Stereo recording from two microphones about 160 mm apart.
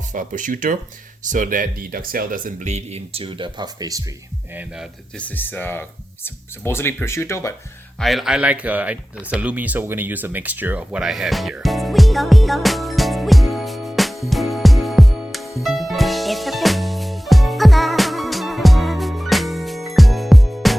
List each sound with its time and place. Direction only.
0.1 s speech: 55° right (ahead or behind); by 4.0 s 20° right (ahead or behind)
5.1 s speech: 10° left (ahead or behind)
7.9 s a sound: centre (ahead or behind)